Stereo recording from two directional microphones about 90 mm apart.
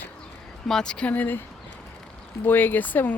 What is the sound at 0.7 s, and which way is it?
Speech, 10° left (ahead or behind).